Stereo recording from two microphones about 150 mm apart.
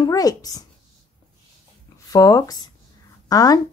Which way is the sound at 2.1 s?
25° left (ahead or behind).